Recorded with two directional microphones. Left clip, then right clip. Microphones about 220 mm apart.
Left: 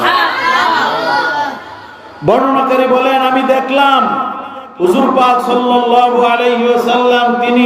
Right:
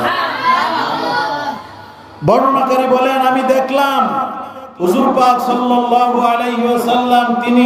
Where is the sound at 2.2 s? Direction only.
25° right (ahead or behind).